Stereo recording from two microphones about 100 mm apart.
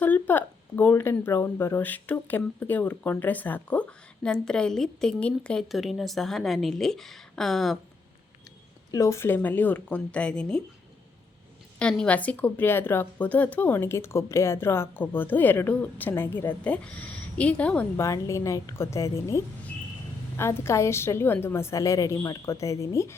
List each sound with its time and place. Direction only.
0.0 s a sound: 20° left (ahead or behind)
1.2 s speech: 20° left (ahead or behind)
5.6 s a woman's voice: centre (ahead or behind)
8.9 s speech: 30° left (ahead or behind); by 10.6 s 10° left (ahead or behind)
11.8 s a woman's voice: 10° left (ahead or behind)
17.9 s a woman's voice: 30° left (ahead or behind)